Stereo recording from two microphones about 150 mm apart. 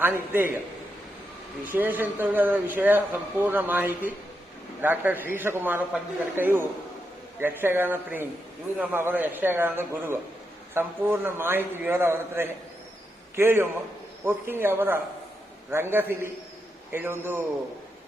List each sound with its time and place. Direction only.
0.0 s a man's voice: 15° right (ahead or behind)
1.6 s a man's voice: 10° right (ahead or behind)